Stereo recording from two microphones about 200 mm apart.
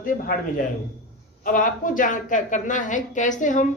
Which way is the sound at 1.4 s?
40° left (ahead or behind).